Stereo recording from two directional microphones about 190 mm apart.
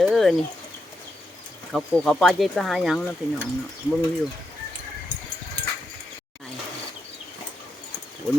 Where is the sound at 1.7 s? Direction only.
5° left (ahead or behind).